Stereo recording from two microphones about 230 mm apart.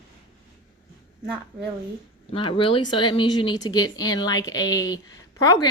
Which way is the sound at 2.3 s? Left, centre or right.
Left.